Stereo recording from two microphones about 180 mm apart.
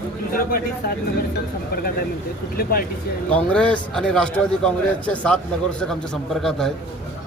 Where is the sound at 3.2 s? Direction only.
5° left (ahead or behind).